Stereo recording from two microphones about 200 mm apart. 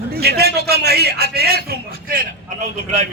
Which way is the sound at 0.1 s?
55° right (ahead or behind).